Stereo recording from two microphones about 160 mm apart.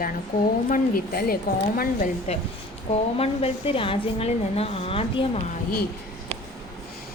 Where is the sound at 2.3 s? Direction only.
40° left (ahead or behind).